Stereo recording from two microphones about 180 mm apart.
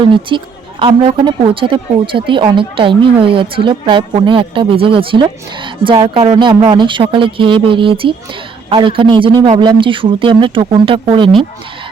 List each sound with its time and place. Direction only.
0.0 s a woman's voice: 30° right (ahead or behind)